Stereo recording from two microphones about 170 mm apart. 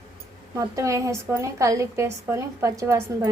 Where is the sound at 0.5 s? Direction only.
20° right (ahead or behind).